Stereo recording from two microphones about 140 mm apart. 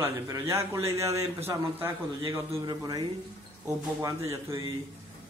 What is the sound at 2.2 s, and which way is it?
A man's voice, 30° right (ahead or behind).